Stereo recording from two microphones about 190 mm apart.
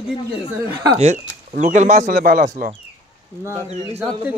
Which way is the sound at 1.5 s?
40° right (ahead or behind).